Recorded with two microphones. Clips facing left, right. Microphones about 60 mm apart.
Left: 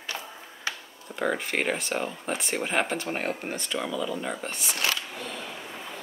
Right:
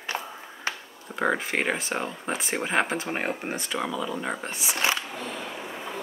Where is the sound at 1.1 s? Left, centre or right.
Right.